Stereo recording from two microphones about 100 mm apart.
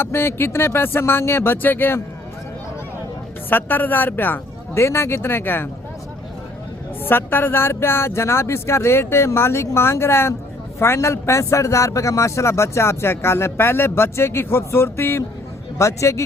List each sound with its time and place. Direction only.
0.0 s a man's voice: 25° left (ahead or behind)
3.5 s a man's voice: 20° left (ahead or behind)
7.0 s a man's voice: 20° left (ahead or behind)